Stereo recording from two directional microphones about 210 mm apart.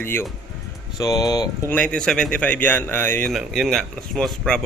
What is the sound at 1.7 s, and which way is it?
Speech, 5° left (ahead or behind).